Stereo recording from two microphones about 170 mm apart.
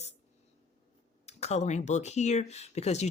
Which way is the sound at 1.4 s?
40° left (ahead or behind).